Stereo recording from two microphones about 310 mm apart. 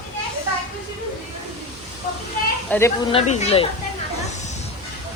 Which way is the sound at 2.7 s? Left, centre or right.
Centre.